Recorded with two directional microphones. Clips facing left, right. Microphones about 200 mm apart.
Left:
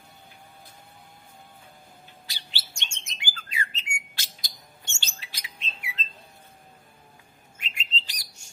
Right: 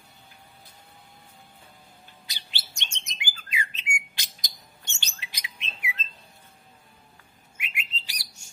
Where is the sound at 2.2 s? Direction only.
20° right (ahead or behind).